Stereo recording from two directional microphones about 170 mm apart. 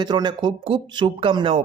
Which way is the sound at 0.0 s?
25° right (ahead or behind).